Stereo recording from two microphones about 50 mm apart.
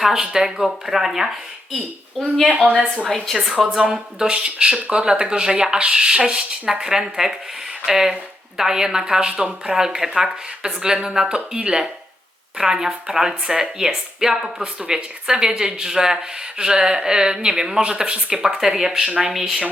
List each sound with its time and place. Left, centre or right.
0.0 s speech: centre
2.4 s a woman's voice: centre
3.5 s speech: centre